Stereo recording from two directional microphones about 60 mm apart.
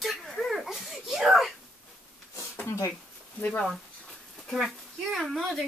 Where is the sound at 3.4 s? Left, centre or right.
Left.